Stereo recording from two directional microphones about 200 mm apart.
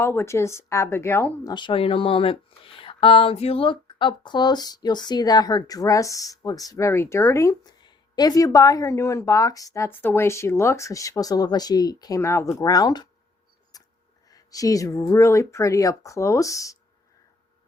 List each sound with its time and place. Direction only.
0.0 s speech: 15° left (ahead or behind)
13.7 s a sound: 20° left (ahead or behind)
14.3 s speech: 15° left (ahead or behind)